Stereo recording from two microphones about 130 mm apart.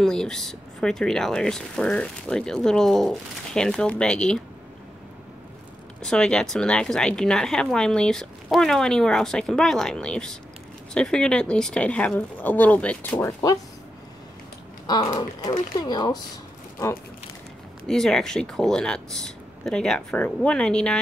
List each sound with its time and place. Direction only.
0.0 s speech: 5° left (ahead or behind)
5.9 s speech: 5° left (ahead or behind)
13.2 s speech: 25° left (ahead or behind)
14.9 s speech: 30° left (ahead or behind)
17.8 s speech: 5° left (ahead or behind)